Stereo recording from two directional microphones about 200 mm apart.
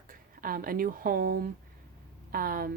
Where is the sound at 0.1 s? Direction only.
45° right (ahead or behind).